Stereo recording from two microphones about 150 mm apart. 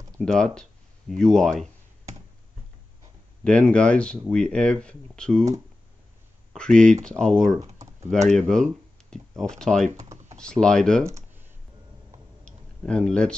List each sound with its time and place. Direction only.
0.2 s speech: 5° left (ahead or behind)
3.4 s speech: 5° left (ahead or behind)
6.5 s speech: 5° left (ahead or behind)
11.1 s computer keyboard: 20° right (ahead or behind)
12.4 s tick-tock: 5° left (ahead or behind)